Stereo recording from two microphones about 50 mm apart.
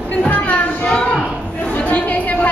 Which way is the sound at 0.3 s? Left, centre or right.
Left.